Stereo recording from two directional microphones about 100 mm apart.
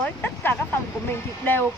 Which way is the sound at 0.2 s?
20° left (ahead or behind).